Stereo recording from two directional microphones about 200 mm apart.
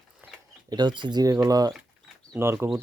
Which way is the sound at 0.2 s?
10° right (ahead or behind).